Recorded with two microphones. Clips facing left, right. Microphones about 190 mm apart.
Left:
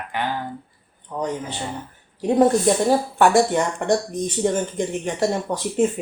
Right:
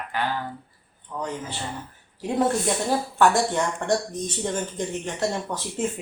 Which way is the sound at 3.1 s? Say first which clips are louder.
Left 2 dB; 10° left (ahead or behind).